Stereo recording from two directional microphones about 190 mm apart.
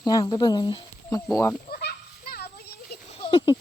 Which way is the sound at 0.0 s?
20° left (ahead or behind).